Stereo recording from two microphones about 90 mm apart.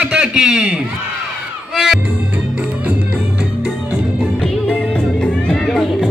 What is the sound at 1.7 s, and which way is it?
Music, 5° right (ahead or behind).